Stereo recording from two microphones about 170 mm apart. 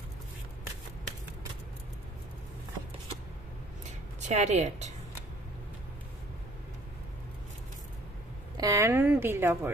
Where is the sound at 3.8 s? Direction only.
40° right (ahead or behind).